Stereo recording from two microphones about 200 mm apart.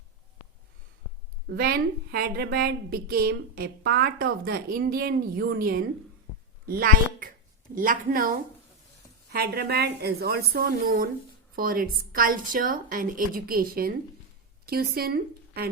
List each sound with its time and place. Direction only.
1.5 s a woman's voice: 50° right (ahead or behind)